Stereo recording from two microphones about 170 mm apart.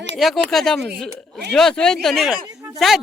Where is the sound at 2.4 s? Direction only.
20° right (ahead or behind).